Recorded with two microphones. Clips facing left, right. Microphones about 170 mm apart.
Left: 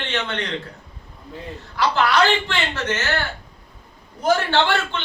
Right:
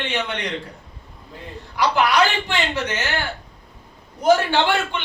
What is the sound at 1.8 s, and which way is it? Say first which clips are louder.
Speech: even; 15° right (ahead or behind).